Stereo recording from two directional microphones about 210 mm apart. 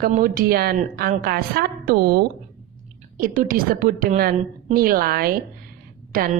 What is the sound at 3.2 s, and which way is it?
A woman's voice, 40° right (ahead or behind).